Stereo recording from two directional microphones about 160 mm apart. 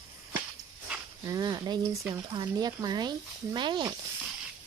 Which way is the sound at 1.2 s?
25° right (ahead or behind).